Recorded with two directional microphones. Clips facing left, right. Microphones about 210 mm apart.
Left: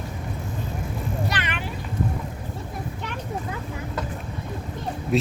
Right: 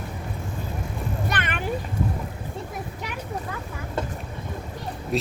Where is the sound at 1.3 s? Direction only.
50° right (ahead or behind).